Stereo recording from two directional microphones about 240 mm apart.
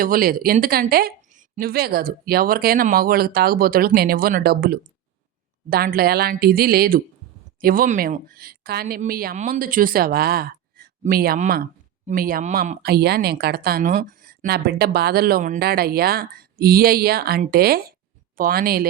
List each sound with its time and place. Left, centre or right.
0.0 s speech: right